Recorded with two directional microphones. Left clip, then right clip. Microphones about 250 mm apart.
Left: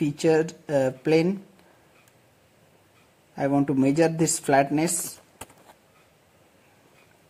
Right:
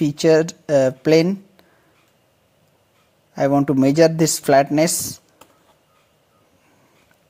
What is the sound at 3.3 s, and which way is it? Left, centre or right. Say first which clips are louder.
Speech: right 6 dB; right.